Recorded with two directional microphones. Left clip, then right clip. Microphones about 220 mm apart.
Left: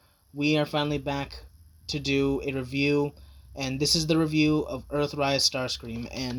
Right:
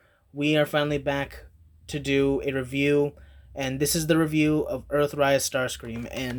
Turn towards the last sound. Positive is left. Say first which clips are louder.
# right 2 dB
turn(degrees=-15)  # may be behind; listen again after turning